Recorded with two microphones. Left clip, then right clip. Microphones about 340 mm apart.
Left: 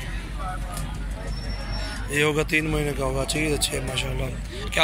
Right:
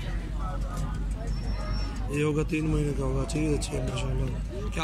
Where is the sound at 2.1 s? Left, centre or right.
Centre.